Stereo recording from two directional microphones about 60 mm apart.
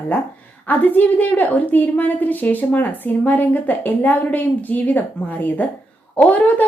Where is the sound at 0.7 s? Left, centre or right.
Left.